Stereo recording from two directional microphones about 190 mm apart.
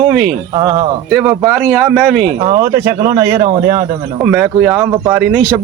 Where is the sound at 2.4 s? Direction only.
20° right (ahead or behind).